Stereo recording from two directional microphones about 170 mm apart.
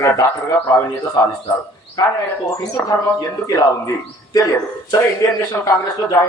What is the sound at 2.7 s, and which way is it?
A man's voice, 20° left (ahead or behind).